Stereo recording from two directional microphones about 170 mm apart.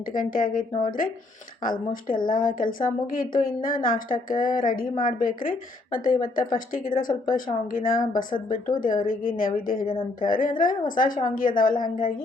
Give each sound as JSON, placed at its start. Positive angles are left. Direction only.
{"t": 0.1, "sound": "a woman's voice", "side_deg": 55}